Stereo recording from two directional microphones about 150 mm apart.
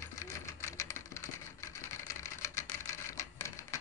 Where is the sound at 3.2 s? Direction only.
20° left (ahead or behind).